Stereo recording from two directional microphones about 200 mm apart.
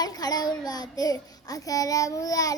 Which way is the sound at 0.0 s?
20° left (ahead or behind).